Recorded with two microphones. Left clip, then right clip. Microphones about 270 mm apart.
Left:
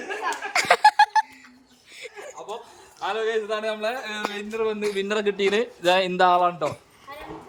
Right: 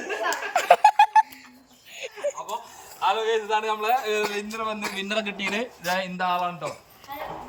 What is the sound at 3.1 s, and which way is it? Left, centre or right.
A man's voice, centre.